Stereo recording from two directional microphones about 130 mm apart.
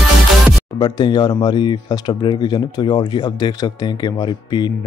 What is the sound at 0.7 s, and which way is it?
Speech, 35° left (ahead or behind).